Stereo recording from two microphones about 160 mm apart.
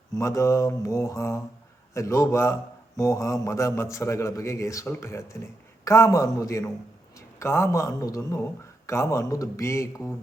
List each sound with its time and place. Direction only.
0.1 s a man's voice: 20° left (ahead or behind)